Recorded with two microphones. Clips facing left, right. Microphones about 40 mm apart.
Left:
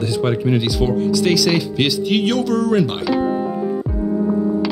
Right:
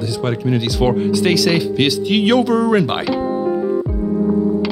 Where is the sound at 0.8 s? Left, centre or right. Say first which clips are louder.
Right 6 dB; right.